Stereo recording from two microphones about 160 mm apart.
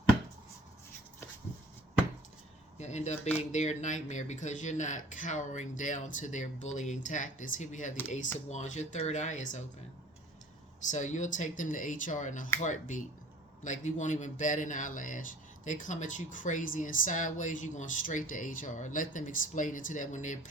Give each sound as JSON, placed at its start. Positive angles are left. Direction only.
{"t": 2.7, "sound": "speech", "side_deg": 45}
{"t": 10.9, "sound": "speech", "side_deg": 50}